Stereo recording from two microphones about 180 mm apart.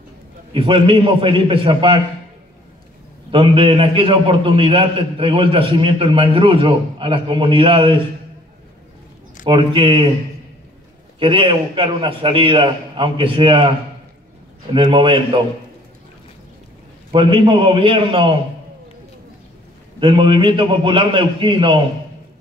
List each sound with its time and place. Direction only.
0.5 s a man's voice: 30° right (ahead or behind)
3.3 s a man's voice: 30° right (ahead or behind)
9.4 s a man's voice: 30° right (ahead or behind)
11.1 s a man's voice: 30° right (ahead or behind)
14.7 s a man's voice: 30° right (ahead or behind)
17.1 s a man's voice: 30° right (ahead or behind)
20.0 s a man's voice: 30° right (ahead or behind)